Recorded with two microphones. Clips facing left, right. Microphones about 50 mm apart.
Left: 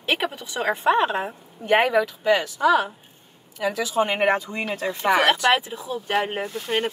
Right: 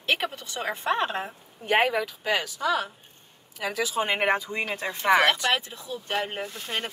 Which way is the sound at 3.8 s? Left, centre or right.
Centre.